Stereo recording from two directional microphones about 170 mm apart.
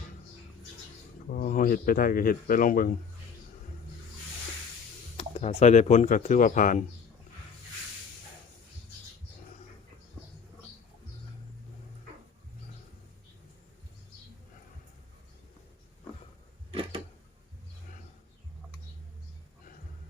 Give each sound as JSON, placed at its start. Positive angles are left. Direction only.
{"t": 1.3, "sound": "speech", "side_deg": 50}
{"t": 5.1, "sound": "speech", "side_deg": 40}